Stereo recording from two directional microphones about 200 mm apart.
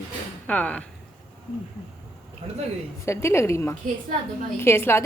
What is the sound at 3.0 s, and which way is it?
Speech, 15° left (ahead or behind).